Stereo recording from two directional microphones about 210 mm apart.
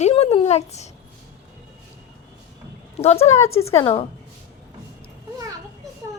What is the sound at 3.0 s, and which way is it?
A woman's voice, 30° left (ahead or behind).